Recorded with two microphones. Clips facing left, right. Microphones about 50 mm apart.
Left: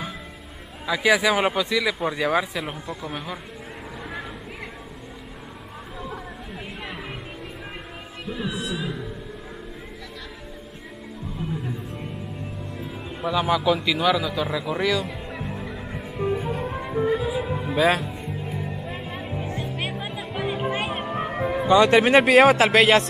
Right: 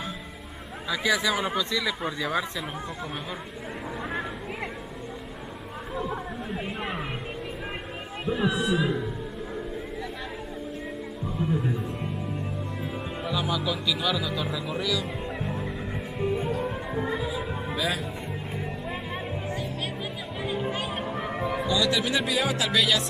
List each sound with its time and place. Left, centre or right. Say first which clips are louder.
0.8 s speech: left 6 dB; centre
5.9 s chatter: right 4 dB; centre
8.3 s speech: right 4 dB; right
8.7 s speech: right 4 dB; centre
11.4 s music: right 3 dB; centre
13.2 s a man's voice: left 7 dB; centre
14.0 s speech: left 8 dB; centre
15.3 s music: even; centre
17.7 s speech: left 10 dB; left
18.9 s music: even; centre
20.3 s music: left 4 dB; left
21.3 s music: left 3 dB; left
21.6 s speech: left 11 dB; left